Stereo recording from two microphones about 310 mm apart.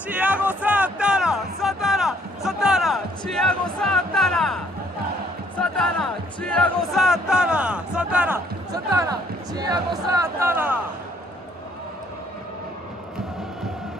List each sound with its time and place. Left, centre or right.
0.1 s music: centre